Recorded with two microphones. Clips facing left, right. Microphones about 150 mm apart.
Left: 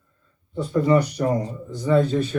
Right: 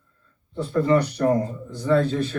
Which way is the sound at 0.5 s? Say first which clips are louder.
Left 1 dB; 15° left (ahead or behind).